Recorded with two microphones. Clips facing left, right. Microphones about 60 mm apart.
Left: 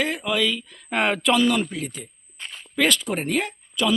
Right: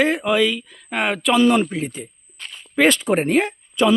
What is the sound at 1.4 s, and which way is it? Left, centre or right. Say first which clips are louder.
Speech: right 5 dB; right.